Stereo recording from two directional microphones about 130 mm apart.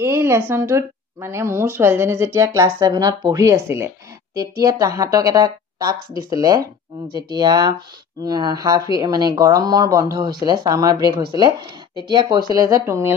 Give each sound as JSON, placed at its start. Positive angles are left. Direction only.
{"t": 0.0, "sound": "a woman's voice", "side_deg": -20}